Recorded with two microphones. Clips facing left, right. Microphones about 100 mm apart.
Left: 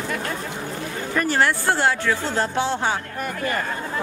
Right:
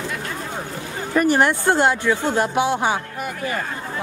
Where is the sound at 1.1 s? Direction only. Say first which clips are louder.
Right 4 dB; 15° right (ahead or behind).